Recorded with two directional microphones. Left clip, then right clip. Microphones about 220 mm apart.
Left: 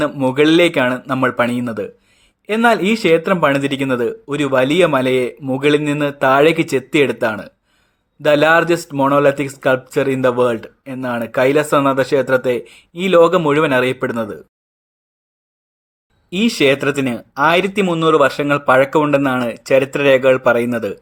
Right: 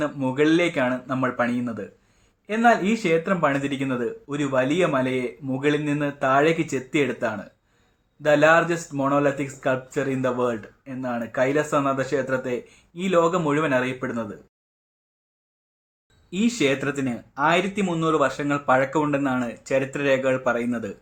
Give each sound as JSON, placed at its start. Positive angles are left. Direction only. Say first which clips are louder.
{"t": 0.0, "sound": "speech", "louder": "left 8 dB", "side_deg": 50}
{"t": 16.3, "sound": "speech", "louder": "left 8 dB", "side_deg": 45}